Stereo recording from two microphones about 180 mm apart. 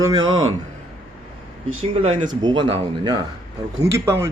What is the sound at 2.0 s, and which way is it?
Speech, 35° right (ahead or behind).